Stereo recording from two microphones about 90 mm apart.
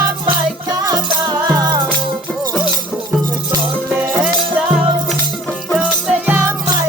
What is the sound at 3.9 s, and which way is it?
Music, 15° right (ahead or behind).